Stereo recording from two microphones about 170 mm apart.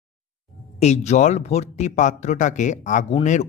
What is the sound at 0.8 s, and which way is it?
Speech, 40° left (ahead or behind).